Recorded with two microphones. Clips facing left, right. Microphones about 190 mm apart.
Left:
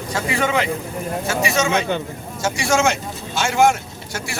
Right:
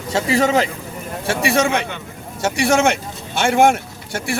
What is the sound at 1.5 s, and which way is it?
Speech, 55° right (ahead or behind).